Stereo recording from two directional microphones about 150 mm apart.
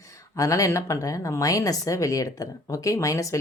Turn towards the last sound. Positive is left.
turn(degrees=20)  # may be behind; listen again after turning